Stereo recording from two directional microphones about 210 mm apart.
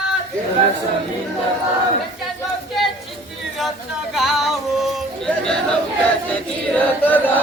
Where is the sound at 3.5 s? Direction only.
Centre (ahead or behind).